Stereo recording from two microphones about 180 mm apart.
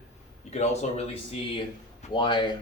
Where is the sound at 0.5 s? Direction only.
40° left (ahead or behind).